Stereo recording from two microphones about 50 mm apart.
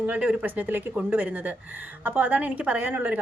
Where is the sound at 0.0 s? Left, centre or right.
Right.